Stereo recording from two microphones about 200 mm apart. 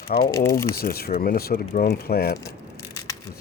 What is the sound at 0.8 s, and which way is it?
Speech, 50° left (ahead or behind).